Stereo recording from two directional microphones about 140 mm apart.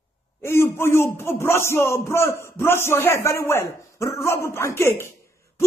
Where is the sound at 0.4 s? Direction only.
20° left (ahead or behind).